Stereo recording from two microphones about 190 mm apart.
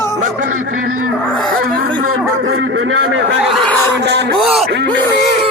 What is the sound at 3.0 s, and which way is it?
Speech, 75° right (ahead or behind).